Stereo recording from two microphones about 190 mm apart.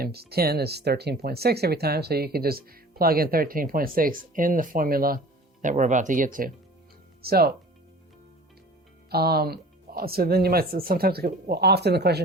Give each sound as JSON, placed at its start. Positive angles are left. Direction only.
{"t": 0.0, "sound": "speech", "side_deg": -55}
{"t": 9.0, "sound": "speech", "side_deg": -55}